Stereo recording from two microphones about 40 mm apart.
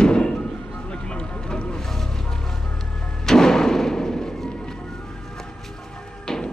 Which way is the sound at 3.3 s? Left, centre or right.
Centre.